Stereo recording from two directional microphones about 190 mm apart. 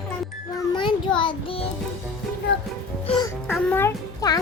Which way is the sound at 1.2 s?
25° left (ahead or behind).